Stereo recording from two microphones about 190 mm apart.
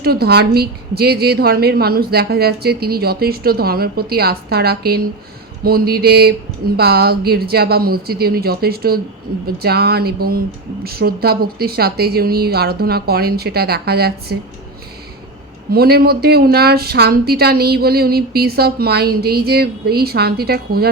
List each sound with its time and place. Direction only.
0.0 s a woman's voice: 55° right (ahead or behind)
15.7 s a woman's voice: 55° right (ahead or behind)